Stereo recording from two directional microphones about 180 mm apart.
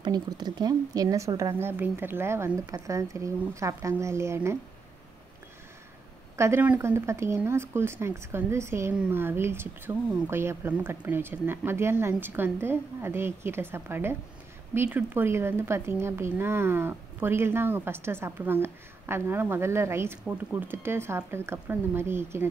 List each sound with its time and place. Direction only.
0.0 s speech: 25° right (ahead or behind)
6.3 s speech: 15° right (ahead or behind)